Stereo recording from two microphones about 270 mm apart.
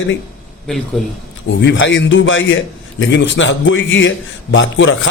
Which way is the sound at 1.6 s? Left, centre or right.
Left.